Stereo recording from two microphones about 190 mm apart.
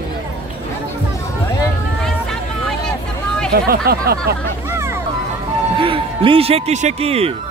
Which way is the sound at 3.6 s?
50° right (ahead or behind).